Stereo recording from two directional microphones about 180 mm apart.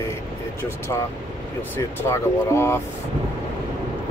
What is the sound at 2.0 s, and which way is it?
Speech, 15° left (ahead or behind).